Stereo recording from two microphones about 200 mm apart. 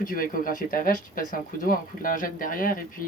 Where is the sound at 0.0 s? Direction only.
45° left (ahead or behind).